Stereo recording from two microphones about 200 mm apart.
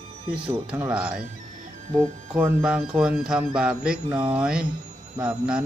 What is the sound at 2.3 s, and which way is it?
Speech, 5° right (ahead or behind).